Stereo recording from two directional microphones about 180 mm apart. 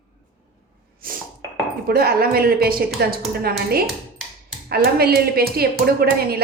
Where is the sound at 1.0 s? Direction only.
55° right (ahead or behind).